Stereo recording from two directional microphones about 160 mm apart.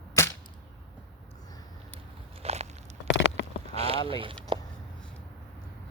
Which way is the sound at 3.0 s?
90° left.